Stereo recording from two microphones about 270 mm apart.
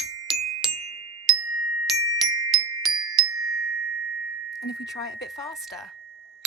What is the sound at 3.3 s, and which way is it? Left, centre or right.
Chime, right.